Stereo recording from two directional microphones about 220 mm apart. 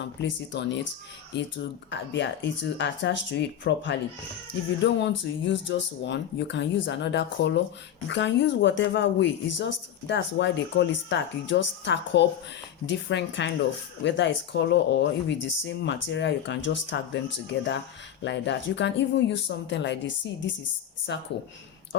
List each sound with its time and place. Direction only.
0.2 s a woman's voice: 55° left (ahead or behind)
4.9 s a woman's voice: 55° left (ahead or behind)
18.2 s speech: 55° left (ahead or behind)